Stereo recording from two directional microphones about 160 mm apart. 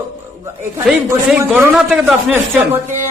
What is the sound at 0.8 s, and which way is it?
A man's voice, 5° right (ahead or behind).